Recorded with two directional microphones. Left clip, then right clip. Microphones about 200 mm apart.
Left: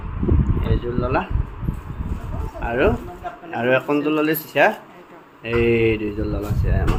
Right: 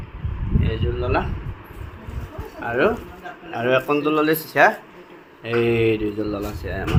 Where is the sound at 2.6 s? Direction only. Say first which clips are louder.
Even; 20° left (ahead or behind).